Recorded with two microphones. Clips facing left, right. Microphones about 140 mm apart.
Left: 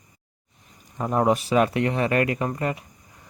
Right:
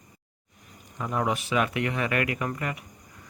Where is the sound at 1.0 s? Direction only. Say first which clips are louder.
Left 6 dB; 40° left (ahead or behind).